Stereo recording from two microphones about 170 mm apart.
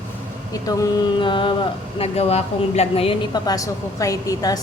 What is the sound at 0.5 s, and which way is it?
A woman's voice, 20° left (ahead or behind).